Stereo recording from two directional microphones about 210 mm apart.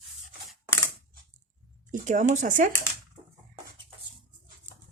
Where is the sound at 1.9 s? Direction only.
35° right (ahead or behind).